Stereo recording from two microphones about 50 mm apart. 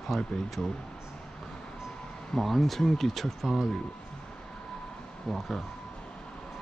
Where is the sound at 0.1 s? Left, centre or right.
Centre.